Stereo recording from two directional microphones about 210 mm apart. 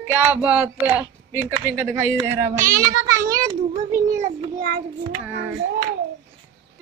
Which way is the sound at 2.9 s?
15° right (ahead or behind).